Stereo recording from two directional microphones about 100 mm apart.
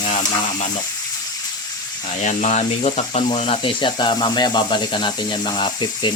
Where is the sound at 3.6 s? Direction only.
55° left (ahead or behind).